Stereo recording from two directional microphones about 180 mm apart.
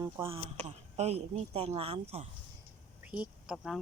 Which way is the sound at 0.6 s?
35° right (ahead or behind).